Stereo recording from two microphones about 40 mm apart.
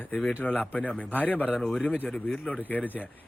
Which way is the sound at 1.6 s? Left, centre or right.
Centre.